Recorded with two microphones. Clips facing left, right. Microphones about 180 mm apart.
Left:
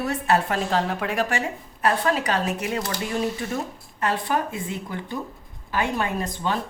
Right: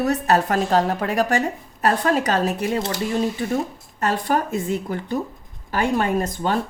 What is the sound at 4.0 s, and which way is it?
A woman's voice, 45° right (ahead or behind).